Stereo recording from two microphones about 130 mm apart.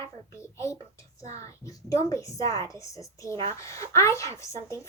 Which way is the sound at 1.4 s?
25° left (ahead or behind).